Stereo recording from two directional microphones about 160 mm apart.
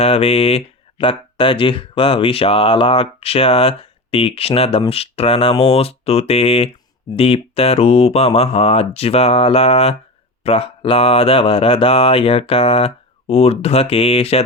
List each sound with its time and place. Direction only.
0.0 s speech: 40° left (ahead or behind)